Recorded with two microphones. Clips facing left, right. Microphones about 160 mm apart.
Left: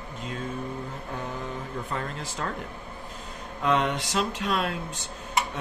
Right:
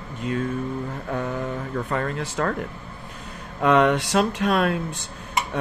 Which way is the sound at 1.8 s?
65° right (ahead or behind).